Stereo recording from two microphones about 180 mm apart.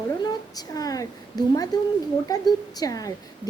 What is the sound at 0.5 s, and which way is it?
A woman's voice, 20° left (ahead or behind).